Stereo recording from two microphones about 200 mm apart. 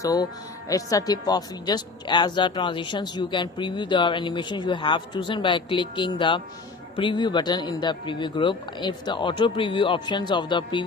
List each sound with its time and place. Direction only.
0.0 s speech: 20° left (ahead or behind)